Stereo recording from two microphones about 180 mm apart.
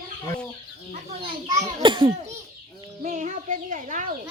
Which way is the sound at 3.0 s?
45° right (ahead or behind).